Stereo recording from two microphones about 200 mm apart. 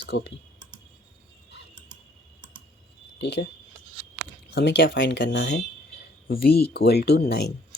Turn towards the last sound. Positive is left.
turn(degrees=55)  # may be behind; listen again after turning